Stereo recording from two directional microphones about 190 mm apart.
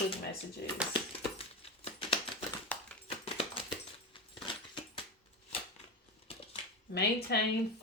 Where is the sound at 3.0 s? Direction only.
30° left (ahead or behind).